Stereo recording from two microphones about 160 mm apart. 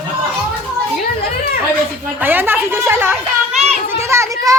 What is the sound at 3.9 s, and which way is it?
Children playing, 15° right (ahead or behind).